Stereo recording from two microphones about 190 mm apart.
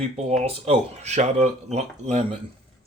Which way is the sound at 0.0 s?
35° right (ahead or behind).